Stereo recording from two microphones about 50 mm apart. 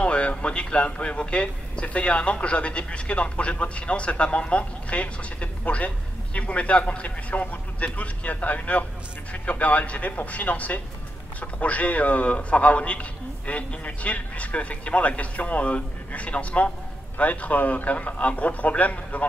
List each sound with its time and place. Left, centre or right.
0.0 s a man's voice: left